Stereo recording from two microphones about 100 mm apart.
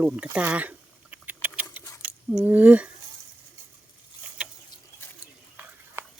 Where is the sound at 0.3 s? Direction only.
15° right (ahead or behind).